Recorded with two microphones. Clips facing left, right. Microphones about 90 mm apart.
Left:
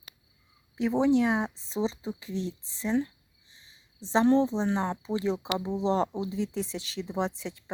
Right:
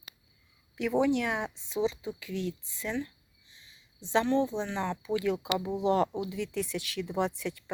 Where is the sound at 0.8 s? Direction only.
30° left (ahead or behind).